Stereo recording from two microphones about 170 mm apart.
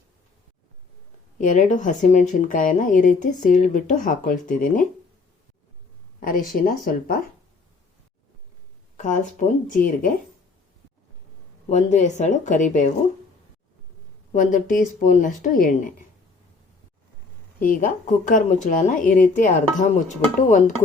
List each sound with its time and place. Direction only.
1.4 s speech: 50° left (ahead or behind)
6.1 s speech: 55° left (ahead or behind)
9.0 s speech: 50° left (ahead or behind)
11.7 s speech: 45° left (ahead or behind)
14.3 s speech: 50° left (ahead or behind)
17.6 s speech: 50° left (ahead or behind)